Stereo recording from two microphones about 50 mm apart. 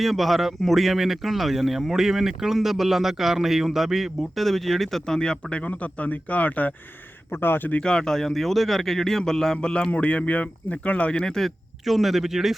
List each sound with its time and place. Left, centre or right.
0.0 s speech: centre; by 6.7 s left
7.3 s speech: left
7.8 s speech: centre
11.1 s speech: centre
11.9 s speech: centre